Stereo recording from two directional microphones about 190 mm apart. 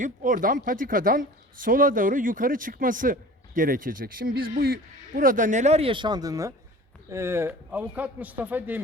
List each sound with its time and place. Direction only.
0.0 s speech: 45° right (ahead or behind); by 8.8 s 10° right (ahead or behind)